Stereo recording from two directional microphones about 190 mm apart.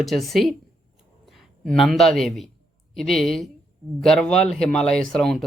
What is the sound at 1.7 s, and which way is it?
Speech, centre (ahead or behind).